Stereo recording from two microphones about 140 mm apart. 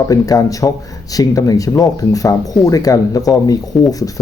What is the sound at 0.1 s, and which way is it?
Speech, 25° left (ahead or behind).